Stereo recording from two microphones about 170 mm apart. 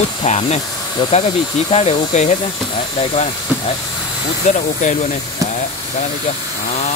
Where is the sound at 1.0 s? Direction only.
30° left (ahead or behind).